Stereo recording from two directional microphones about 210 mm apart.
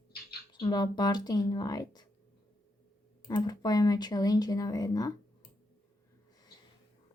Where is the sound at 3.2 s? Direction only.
20° left (ahead or behind).